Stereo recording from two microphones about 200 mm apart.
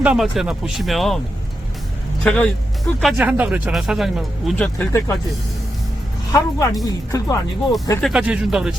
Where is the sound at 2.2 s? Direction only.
5° left (ahead or behind).